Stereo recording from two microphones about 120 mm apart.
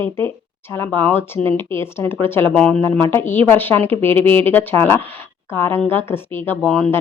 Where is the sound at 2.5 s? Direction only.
10° left (ahead or behind).